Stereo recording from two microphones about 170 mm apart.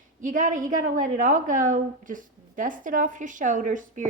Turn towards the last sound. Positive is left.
turn(degrees=-50)  # may be behind; listen again after turning